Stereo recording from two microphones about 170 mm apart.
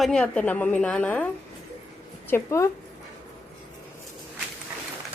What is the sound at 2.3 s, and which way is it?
Speech, 15° left (ahead or behind).